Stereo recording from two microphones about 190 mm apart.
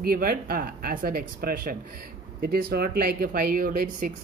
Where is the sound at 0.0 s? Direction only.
50° right (ahead or behind).